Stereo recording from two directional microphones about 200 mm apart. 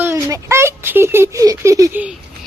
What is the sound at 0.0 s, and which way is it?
Speech, 15° right (ahead or behind).